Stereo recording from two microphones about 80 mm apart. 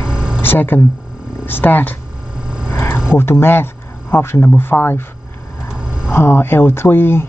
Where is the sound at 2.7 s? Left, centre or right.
Left.